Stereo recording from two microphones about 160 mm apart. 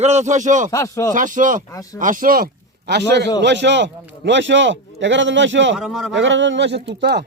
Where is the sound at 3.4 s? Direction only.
90° right.